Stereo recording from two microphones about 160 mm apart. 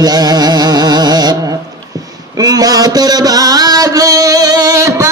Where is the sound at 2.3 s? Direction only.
25° right (ahead or behind).